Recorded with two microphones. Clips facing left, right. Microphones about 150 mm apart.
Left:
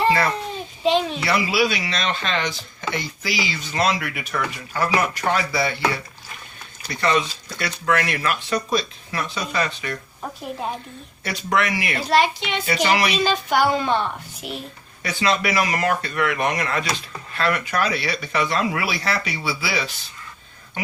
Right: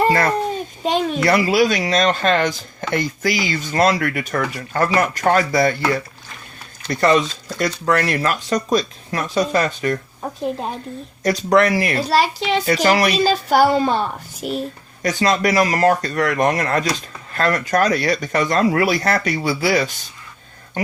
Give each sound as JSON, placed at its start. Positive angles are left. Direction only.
{"t": 0.0, "sound": "a child's voice", "side_deg": -45}
{"t": 11.2, "sound": "speech", "side_deg": -40}